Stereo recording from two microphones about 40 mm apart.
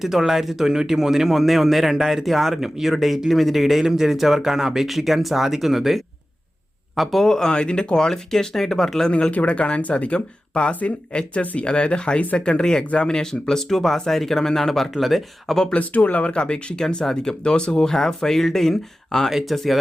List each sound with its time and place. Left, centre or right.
0.0 s speech: centre
9.3 s speech: left; by 15.6 s centre
15.7 s speech: left
17.9 s speech: centre
19.3 s speech: centre
19.5 s speech: centre